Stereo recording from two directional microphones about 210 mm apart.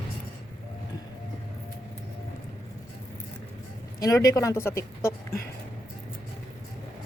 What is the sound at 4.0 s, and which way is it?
Speech, 15° left (ahead or behind).